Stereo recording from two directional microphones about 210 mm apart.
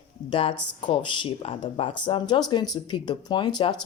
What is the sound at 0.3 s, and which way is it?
Speech, 25° left (ahead or behind).